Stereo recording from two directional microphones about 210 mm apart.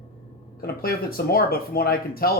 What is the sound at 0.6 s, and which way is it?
Speech, 45° left (ahead or behind).